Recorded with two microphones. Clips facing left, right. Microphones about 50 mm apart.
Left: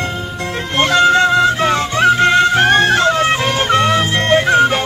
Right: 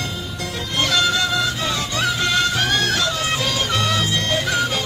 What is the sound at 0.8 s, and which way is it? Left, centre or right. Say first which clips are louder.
Music: left 9 dB; left.